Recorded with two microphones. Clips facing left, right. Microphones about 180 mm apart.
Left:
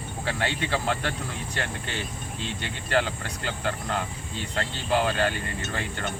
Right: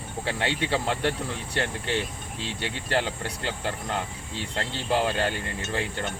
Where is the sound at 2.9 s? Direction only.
25° right (ahead or behind).